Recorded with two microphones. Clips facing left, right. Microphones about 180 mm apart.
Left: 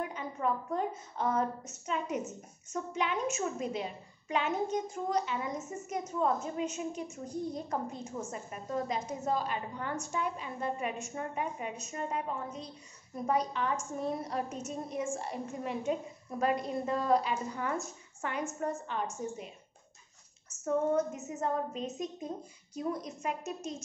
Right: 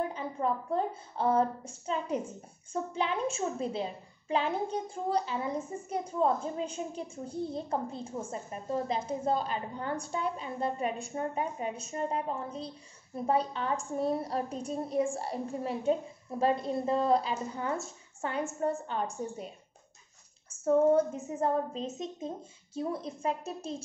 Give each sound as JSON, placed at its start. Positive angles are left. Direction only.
{"t": 0.0, "sound": "a woman's voice", "side_deg": -30}
{"t": 20.6, "sound": "a woman's voice", "side_deg": -30}